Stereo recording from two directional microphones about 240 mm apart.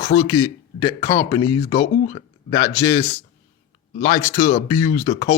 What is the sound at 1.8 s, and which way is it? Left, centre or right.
Speech, left.